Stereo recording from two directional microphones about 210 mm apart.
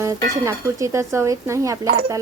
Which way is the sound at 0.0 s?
15° right (ahead or behind).